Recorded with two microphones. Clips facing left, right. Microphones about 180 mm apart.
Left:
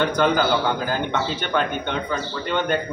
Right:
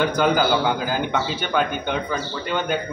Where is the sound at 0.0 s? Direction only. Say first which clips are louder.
Even; 5° right (ahead or behind).